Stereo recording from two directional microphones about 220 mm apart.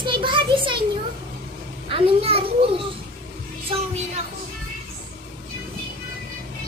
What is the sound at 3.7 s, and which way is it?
Music, 25° right (ahead or behind).